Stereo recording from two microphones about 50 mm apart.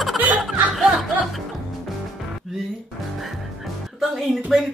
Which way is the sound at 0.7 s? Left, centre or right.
Centre.